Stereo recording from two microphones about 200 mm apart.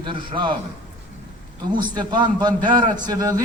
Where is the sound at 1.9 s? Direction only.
20° right (ahead or behind).